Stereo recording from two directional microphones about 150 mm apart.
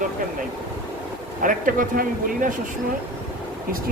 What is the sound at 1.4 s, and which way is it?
A man's voice, 65° right (ahead or behind).